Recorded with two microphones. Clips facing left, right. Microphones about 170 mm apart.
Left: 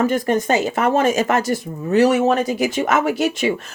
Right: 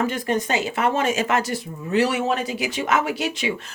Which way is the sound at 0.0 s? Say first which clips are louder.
Left 5 dB; 45° left (ahead or behind).